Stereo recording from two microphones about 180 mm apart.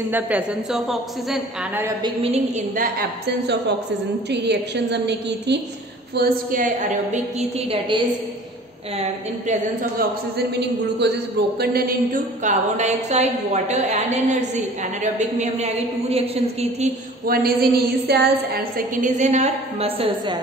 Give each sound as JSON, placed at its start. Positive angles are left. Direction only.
{"t": 0.1, "sound": "a woman's voice", "side_deg": -5}
{"t": 2.0, "sound": "a woman's voice", "side_deg": -35}
{"t": 3.3, "sound": "a man's voice", "side_deg": -70}
{"t": 6.1, "sound": "a woman's voice", "side_deg": -55}
{"t": 9.5, "sound": "a man's voice", "side_deg": -60}
{"t": 11.6, "sound": "a woman's voice", "side_deg": -55}
{"t": 17.3, "sound": "a woman's voice", "side_deg": -55}